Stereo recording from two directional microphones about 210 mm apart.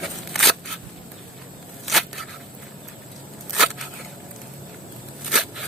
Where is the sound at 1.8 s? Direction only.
Centre (ahead or behind).